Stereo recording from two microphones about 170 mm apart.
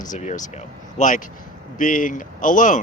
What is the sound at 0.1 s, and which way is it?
Speech, 45° left (ahead or behind).